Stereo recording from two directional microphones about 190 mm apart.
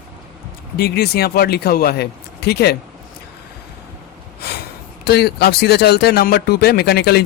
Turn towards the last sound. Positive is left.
turn(degrees=60)  # may be behind; listen again after turning